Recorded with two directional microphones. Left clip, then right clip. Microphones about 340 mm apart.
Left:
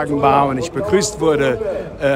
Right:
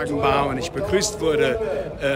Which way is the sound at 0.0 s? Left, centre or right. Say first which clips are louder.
Left 6 dB; centre.